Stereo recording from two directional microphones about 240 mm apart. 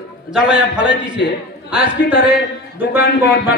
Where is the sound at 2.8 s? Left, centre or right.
Left.